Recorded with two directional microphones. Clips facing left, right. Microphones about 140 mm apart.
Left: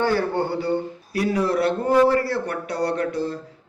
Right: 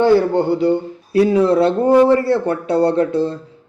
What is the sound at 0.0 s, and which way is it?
Speech, 20° right (ahead or behind).